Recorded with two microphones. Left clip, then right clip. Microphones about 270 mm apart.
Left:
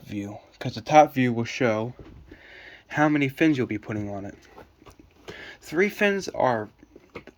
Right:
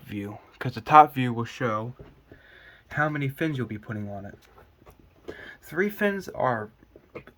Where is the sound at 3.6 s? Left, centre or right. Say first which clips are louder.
Left 6 dB; centre.